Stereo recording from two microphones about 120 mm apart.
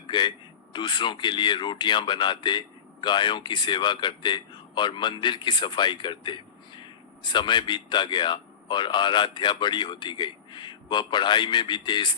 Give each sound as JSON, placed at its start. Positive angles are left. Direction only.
{"t": 0.1, "sound": "a man's voice", "side_deg": 40}